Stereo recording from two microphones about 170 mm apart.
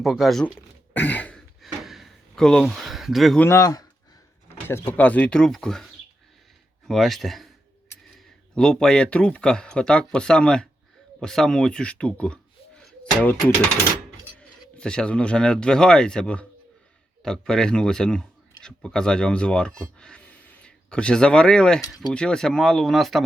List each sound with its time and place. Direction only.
0.0 s speech: centre (ahead or behind)
0.9 s a sound: 10° left (ahead or behind)
3.4 s speech: 20° left (ahead or behind)
4.9 s speech: 10° left (ahead or behind)
8.5 s speech: 5° left (ahead or behind)
14.3 s speech: 5° left (ahead or behind)